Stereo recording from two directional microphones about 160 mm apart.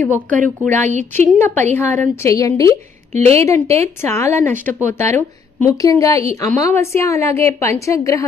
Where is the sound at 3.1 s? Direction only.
45° right (ahead or behind).